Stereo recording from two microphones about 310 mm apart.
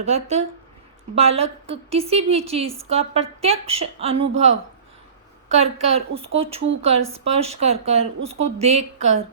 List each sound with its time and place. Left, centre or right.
0.0 s a woman's voice: right